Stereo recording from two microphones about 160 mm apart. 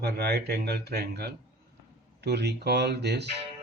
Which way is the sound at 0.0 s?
90° right.